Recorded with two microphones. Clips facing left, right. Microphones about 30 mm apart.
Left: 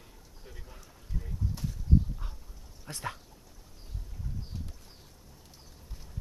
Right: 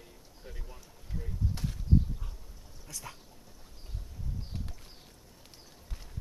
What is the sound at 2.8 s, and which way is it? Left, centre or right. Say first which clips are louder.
Dog: left 7 dB; left.